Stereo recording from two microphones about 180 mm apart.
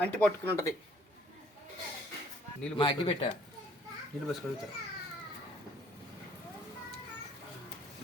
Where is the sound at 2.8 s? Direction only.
25° left (ahead or behind).